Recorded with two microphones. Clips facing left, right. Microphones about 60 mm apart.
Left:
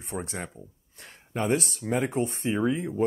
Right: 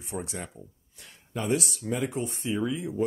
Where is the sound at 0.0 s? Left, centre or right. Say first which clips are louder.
Left 1 dB; left.